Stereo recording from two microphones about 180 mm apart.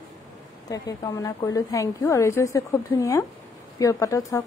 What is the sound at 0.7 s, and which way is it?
A woman's voice, 20° left (ahead or behind).